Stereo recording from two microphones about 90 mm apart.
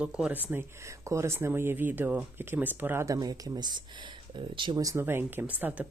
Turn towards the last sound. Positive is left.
turn(degrees=-20)  # may be behind; listen again after turning